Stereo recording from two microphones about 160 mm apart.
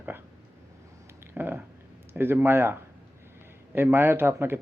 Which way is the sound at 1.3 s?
10° right (ahead or behind).